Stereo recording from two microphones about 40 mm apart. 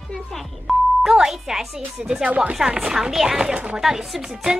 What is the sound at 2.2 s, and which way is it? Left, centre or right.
Speech, right.